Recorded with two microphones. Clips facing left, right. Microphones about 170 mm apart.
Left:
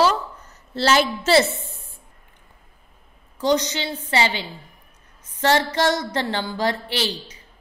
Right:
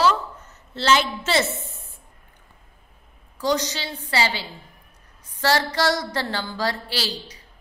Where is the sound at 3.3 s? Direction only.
20° left (ahead or behind).